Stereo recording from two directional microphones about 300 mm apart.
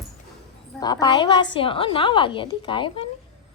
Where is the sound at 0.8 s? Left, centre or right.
Centre.